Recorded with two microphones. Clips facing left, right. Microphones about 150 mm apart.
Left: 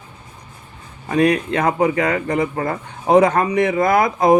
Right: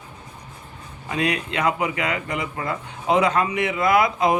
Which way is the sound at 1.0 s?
45° left (ahead or behind).